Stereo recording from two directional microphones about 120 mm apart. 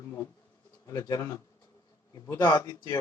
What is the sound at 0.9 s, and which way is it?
A man's voice, 30° left (ahead or behind).